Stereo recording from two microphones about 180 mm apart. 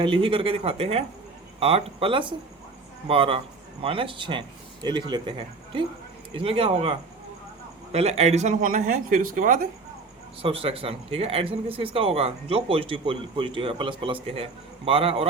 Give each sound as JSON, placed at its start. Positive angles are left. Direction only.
{"t": 0.0, "sound": "a man's voice", "side_deg": -30}
{"t": 6.3, "sound": "speech", "side_deg": -30}
{"t": 7.9, "sound": "speech", "side_deg": -35}
{"t": 10.4, "sound": "speech", "side_deg": -30}